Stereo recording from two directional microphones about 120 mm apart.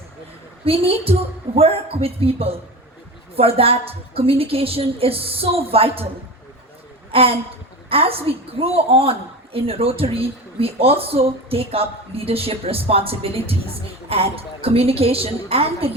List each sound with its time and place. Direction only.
0.6 s a woman's voice: 50° right (ahead or behind)
7.1 s a woman's voice: 50° right (ahead or behind)